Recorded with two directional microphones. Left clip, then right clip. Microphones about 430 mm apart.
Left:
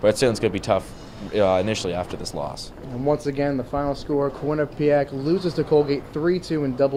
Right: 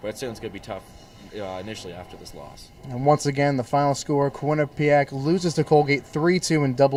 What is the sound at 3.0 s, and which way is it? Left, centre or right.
Speech, right.